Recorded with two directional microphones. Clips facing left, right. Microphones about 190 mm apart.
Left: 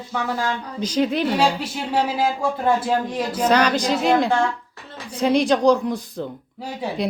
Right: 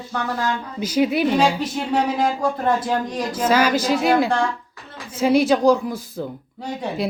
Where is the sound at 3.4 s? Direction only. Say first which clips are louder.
Even; 5° right (ahead or behind).